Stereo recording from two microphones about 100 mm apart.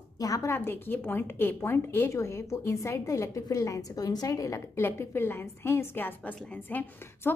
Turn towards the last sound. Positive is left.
turn(degrees=20)  # may be behind; listen again after turning